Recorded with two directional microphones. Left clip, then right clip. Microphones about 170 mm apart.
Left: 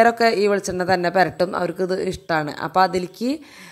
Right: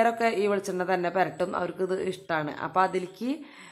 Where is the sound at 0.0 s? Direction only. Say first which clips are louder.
Left 8 dB; 35° left (ahead or behind).